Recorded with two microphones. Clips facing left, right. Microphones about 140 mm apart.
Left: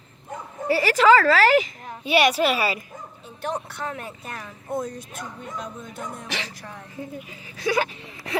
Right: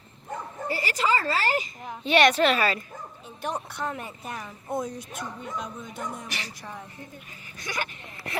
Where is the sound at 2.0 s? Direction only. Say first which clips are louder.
Even; 10° left (ahead or behind).